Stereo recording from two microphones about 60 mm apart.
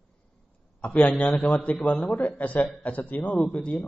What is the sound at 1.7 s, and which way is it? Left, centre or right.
Speech, centre.